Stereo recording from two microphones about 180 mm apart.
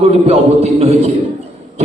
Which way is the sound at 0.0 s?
35° right (ahead or behind).